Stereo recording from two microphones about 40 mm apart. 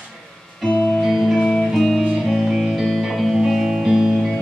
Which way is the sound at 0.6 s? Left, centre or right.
Centre.